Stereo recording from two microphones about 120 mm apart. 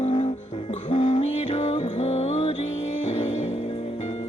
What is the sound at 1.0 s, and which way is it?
Music, 60° left (ahead or behind).